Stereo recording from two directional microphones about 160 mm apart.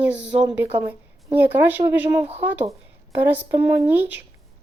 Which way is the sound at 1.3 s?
10° right (ahead or behind).